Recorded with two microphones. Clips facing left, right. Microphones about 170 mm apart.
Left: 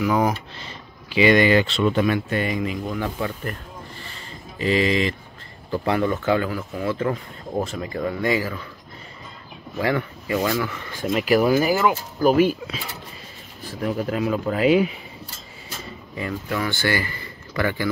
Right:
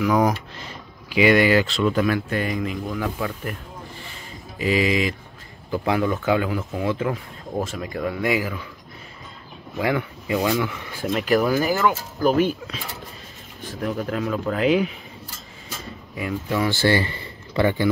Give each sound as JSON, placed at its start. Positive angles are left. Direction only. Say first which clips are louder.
{"t": 0.0, "sound": "speech", "louder": "right 1 dB", "side_deg": 5}
{"t": 0.3, "sound": "speech", "louder": "right 1 dB", "side_deg": -10}
{"t": 4.6, "sound": "speech", "louder": "left 1 dB", "side_deg": -10}
{"t": 7.5, "sound": "speech", "louder": "left 1 dB", "side_deg": 0}
{"t": 9.8, "sound": "speech", "louder": "even", "side_deg": -10}
{"t": 11.1, "sound": "speech", "louder": "left 2 dB", "side_deg": 5}
{"t": 16.4, "sound": "speech", "louder": "right 5 dB", "side_deg": -25}